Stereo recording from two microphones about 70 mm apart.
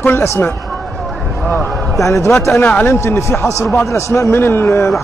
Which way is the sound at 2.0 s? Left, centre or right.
Left.